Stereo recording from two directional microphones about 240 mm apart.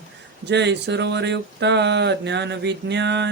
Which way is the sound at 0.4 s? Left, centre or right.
Right.